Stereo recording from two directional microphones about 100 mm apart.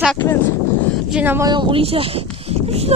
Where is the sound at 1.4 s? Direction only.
50° right (ahead or behind); by 2.9 s 90° right.